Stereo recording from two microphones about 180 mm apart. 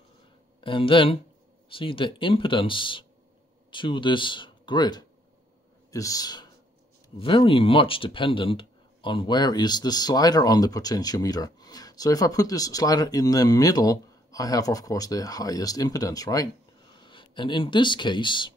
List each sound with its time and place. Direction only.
0.6 s speech: 30° left (ahead or behind)